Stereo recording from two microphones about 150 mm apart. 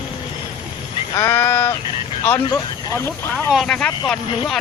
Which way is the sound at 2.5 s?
20° left (ahead or behind).